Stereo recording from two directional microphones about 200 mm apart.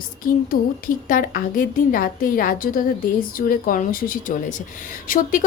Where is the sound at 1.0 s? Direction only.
45° left (ahead or behind).